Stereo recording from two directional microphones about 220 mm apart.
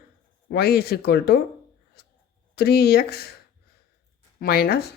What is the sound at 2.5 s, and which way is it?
Speech, 45° left (ahead or behind).